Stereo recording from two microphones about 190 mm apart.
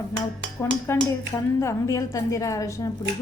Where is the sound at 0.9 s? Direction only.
15° left (ahead or behind).